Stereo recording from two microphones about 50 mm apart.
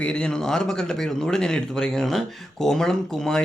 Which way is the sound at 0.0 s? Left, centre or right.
Centre.